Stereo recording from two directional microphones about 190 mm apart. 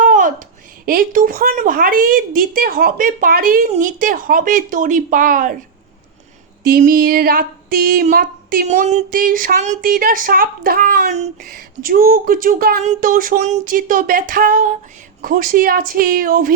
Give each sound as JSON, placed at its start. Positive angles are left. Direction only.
{"t": 0.0, "sound": "a sound", "side_deg": -45}
{"t": 0.9, "sound": "speech", "side_deg": -50}
{"t": 6.7, "sound": "speech", "side_deg": -50}
{"t": 11.1, "sound": "speech", "side_deg": -40}